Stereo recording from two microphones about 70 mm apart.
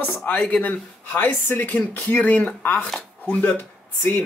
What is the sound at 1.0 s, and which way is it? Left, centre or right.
Speech, left.